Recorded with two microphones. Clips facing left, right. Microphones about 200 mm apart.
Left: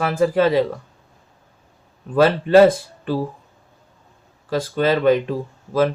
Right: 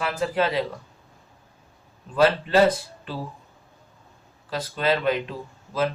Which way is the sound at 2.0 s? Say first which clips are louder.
Left 4 dB; 50° left (ahead or behind).